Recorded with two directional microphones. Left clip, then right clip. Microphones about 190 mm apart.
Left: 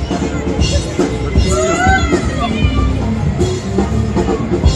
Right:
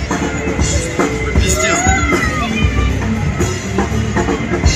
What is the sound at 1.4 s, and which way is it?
Music, 15° right (ahead or behind).